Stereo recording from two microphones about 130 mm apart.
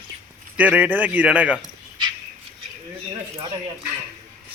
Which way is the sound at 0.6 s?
10° right (ahead or behind).